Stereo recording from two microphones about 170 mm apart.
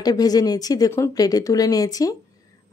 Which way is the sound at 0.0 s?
20° left (ahead or behind).